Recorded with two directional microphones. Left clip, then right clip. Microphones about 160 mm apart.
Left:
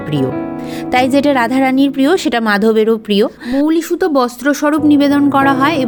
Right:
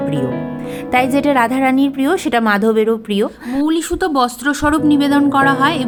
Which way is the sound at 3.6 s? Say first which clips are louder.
Left 2 dB; 10° left (ahead or behind).